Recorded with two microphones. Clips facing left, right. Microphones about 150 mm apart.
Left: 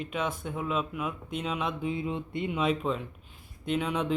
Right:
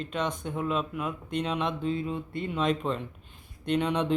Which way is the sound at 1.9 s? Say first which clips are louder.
Right 1 dB; 20° left (ahead or behind).